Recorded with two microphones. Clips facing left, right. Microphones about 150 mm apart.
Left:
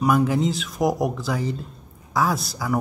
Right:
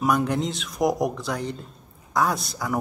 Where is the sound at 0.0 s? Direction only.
Centre (ahead or behind).